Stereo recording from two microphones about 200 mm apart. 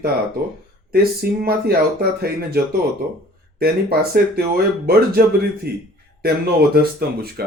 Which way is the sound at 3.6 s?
50° right (ahead or behind).